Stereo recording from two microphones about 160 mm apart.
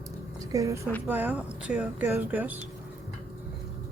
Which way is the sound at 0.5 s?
20° right (ahead or behind).